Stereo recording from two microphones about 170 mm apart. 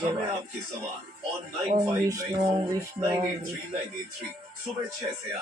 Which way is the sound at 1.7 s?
25° right (ahead or behind).